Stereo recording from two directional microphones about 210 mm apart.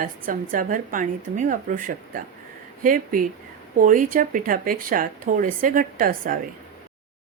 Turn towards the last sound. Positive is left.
turn(degrees=-40)  # may be behind; listen again after turning